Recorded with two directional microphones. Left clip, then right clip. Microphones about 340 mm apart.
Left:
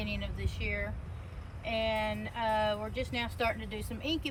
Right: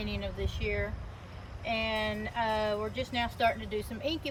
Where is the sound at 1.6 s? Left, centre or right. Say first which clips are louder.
Even; right.